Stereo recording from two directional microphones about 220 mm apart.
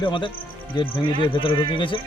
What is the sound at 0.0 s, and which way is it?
A man's voice, 20° left (ahead or behind).